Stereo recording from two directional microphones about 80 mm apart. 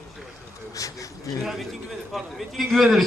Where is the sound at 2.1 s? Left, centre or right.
Centre.